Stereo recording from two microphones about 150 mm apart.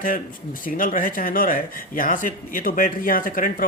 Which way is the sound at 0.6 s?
65° left (ahead or behind).